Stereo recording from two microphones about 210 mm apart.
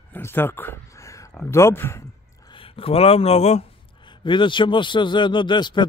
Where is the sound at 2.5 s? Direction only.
25° left (ahead or behind).